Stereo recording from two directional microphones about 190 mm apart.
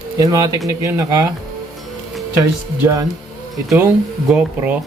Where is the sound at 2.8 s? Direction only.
15° right (ahead or behind).